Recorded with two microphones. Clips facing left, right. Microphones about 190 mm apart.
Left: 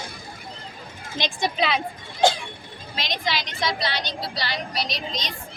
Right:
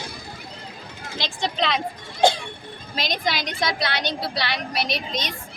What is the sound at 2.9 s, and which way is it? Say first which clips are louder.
A woman's voice: right 2 dB; 40° right (ahead or behind).